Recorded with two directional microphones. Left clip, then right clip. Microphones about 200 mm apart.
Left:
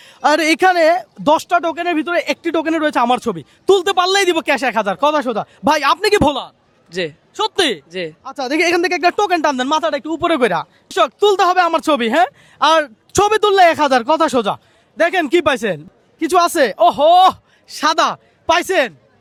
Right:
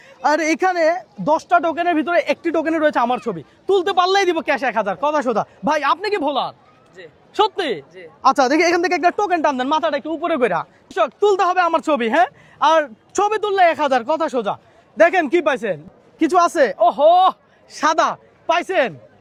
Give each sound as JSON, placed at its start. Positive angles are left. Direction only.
{"t": 0.0, "sound": "speech", "side_deg": 25}
{"t": 5.2, "sound": "speech", "side_deg": 20}
{"t": 5.6, "sound": "speech", "side_deg": 30}
{"t": 7.5, "sound": "speech", "side_deg": 35}
{"t": 8.5, "sound": "speech", "side_deg": 10}
{"t": 14.9, "sound": "speech", "side_deg": 20}
{"t": 17.7, "sound": "a woman's voice", "side_deg": 20}